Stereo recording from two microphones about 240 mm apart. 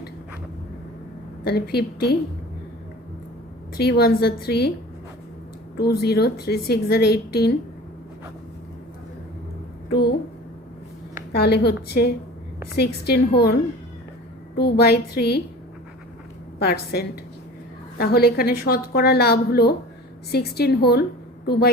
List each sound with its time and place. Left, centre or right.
1.5 s a woman's voice: left
3.8 s a woman's voice: left
5.7 s a woman's voice: left
9.9 s a woman's voice: left
11.3 s a woman's voice: left
16.6 s a woman's voice: left